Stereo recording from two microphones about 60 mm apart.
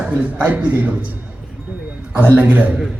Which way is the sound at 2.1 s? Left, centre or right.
Right.